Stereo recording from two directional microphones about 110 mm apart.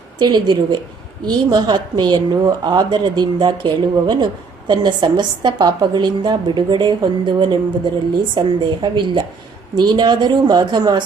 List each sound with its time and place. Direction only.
0.2 s a woman's voice: 45° right (ahead or behind)